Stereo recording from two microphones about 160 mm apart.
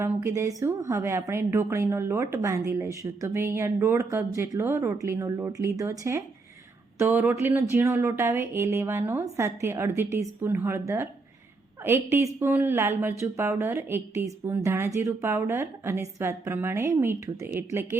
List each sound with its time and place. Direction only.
0.0 s speech: 15° right (ahead or behind)